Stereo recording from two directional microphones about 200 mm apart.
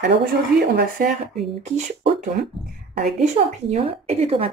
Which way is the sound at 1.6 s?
35° right (ahead or behind).